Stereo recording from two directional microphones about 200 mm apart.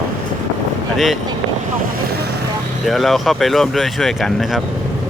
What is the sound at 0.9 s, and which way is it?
Speech, centre (ahead or behind).